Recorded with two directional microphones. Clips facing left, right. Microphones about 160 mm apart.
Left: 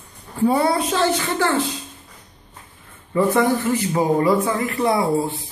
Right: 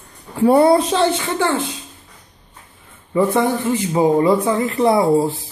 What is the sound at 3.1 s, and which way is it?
A man's voice, 20° right (ahead or behind).